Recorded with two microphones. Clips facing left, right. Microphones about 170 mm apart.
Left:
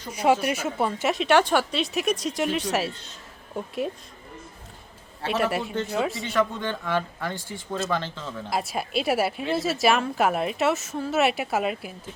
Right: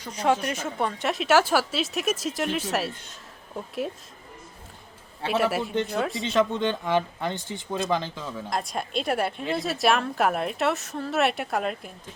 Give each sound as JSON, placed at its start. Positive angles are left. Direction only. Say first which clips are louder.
{"t": 0.1, "sound": "speech", "louder": "left 3 dB", "side_deg": 10}
{"t": 5.2, "sound": "speech", "louder": "right 1 dB", "side_deg": 0}
{"t": 6.2, "sound": "speech", "louder": "right 2 dB", "side_deg": -20}
{"t": 8.4, "sound": "speech", "louder": "left 2 dB", "side_deg": 5}